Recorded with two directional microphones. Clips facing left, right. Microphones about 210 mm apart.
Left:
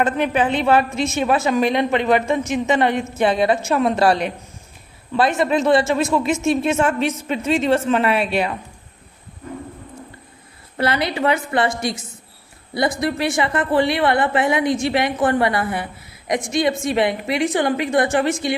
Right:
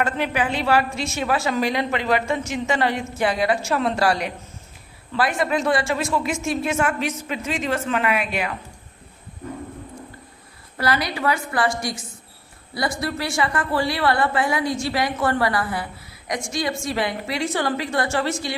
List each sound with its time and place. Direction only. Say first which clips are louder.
0.0 s a woman's voice: left 4 dB; 20° left (ahead or behind)
10.8 s a woman's voice: left 3 dB; 25° left (ahead or behind)